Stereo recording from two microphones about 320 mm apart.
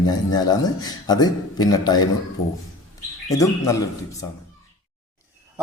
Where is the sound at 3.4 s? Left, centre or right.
Centre.